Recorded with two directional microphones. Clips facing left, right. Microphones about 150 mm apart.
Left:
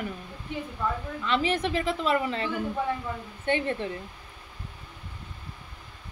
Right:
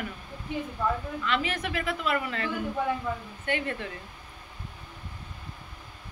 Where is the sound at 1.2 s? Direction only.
30° left (ahead or behind).